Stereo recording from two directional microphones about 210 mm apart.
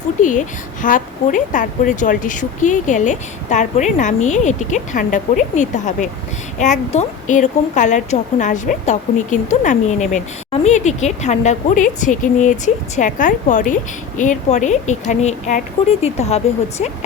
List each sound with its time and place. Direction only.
0.2 s a woman's voice: 35° left (ahead or behind)